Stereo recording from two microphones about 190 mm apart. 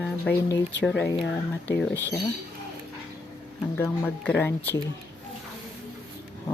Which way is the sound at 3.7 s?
10° left (ahead or behind).